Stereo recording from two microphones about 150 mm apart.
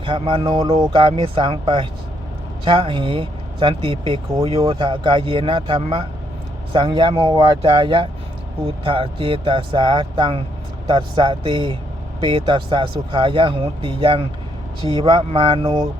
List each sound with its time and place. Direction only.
0.0 s music: 35° right (ahead or behind)
1.1 s speech: 35° right (ahead or behind)